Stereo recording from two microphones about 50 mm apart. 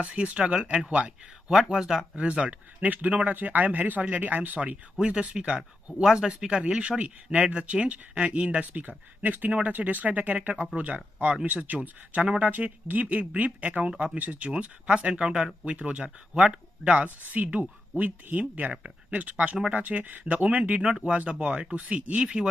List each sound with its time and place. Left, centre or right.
0.0 s speech: right
1.5 s speech: centre
2.1 s speech: right
4.6 s speech: right
14.5 s speech: right